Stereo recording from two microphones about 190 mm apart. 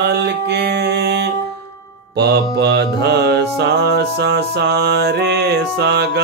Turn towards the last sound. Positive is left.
turn(degrees=-60)  # may be behind; listen again after turning